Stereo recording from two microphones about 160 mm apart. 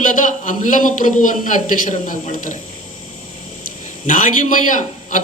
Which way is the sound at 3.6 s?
55° left (ahead or behind).